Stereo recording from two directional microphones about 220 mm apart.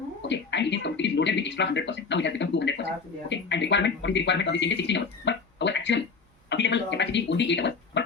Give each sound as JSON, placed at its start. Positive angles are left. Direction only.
{"t": 0.2, "sound": "speech", "side_deg": 55}